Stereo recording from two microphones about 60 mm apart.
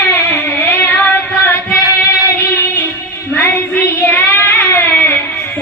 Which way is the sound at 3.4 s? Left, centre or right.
Left.